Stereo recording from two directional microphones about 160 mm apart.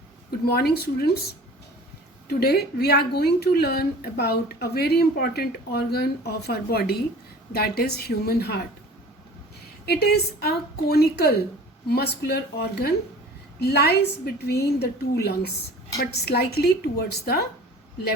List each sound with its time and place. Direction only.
0.3 s a woman's voice: 80° left
2.2 s a woman's voice: 80° left
9.8 s a woman's voice: 85° left